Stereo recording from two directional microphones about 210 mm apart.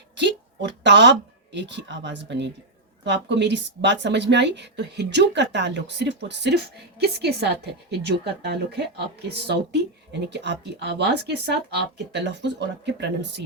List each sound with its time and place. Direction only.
0.2 s a woman's voice: 55° right (ahead or behind)